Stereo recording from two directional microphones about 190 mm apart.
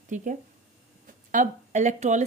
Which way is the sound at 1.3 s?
40° right (ahead or behind).